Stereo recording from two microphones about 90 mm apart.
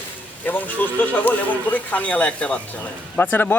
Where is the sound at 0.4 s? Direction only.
20° left (ahead or behind).